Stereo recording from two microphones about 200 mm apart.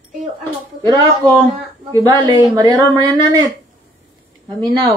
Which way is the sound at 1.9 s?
20° right (ahead or behind).